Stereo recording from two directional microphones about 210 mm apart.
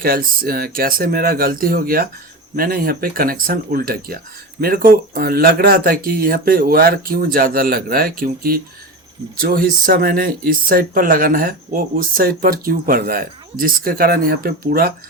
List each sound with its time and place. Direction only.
0.0 s speech: 45° right (ahead or behind)